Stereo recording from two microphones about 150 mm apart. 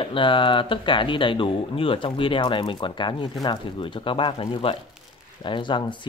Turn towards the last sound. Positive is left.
turn(degrees=30)  # may be behind; listen again after turning